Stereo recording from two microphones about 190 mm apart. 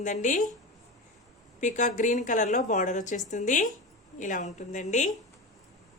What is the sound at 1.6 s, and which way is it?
A woman's voice, 40° left (ahead or behind).